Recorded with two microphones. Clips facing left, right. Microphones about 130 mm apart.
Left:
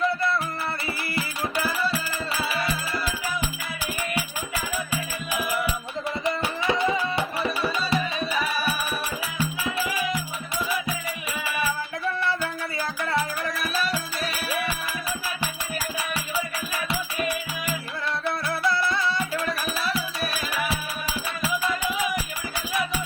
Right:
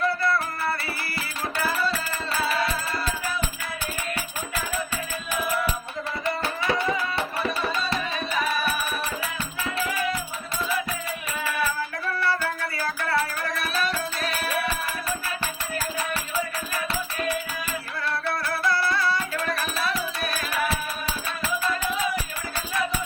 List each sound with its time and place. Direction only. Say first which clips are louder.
1.1 s music: left 4 dB; 15° left (ahead or behind)
4.9 s music: left 1 dB; 10° left (ahead or behind)
9.4 s music: left 5 dB; 10° left (ahead or behind)
11.4 s music: right 1 dB; 10° left (ahead or behind)
12.7 s music: even; 20° left (ahead or behind)
13.6 s music: right 2 dB; 5° left (ahead or behind)
16.9 s music: even; 15° left (ahead or behind)
19.9 s music: even; 5° left (ahead or behind)